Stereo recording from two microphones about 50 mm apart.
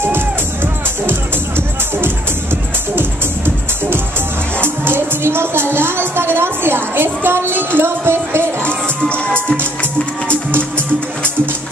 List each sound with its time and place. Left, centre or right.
3.0 s music: right
9.1 s music: left